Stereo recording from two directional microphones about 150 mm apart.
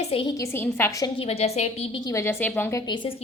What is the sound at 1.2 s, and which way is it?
Speech, 45° left (ahead or behind).